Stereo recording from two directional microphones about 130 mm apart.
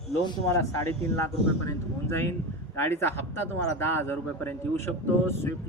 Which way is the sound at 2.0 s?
20° left (ahead or behind).